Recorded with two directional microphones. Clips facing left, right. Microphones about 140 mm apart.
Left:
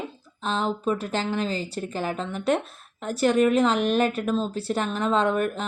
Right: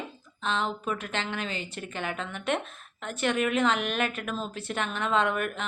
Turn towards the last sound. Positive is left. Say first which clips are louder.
# left 4 dB
turn(degrees=35)  # may be behind; listen again after turning